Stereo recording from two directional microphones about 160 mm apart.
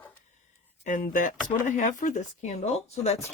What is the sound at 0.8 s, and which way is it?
Speech, 55° left (ahead or behind).